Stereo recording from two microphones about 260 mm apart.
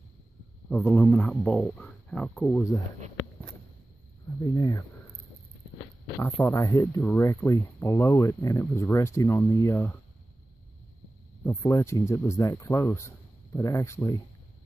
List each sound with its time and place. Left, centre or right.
0.7 s speech: centre
4.4 s speech: centre
6.2 s speech: centre
11.4 s speech: centre